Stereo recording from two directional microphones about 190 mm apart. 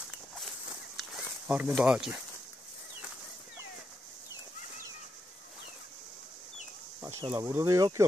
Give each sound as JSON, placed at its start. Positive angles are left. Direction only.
{"t": 1.1, "sound": "speech", "side_deg": -5}
{"t": 7.0, "sound": "insect", "side_deg": -15}
{"t": 7.3, "sound": "speech", "side_deg": -15}